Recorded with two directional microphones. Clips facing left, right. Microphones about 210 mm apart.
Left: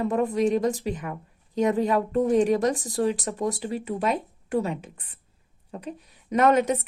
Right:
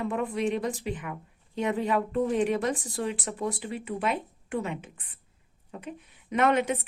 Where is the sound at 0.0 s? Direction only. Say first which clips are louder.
Left 5 dB; 40° left (ahead or behind).